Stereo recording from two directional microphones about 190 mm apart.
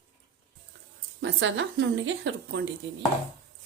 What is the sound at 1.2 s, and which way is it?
Speech, 70° right (ahead or behind).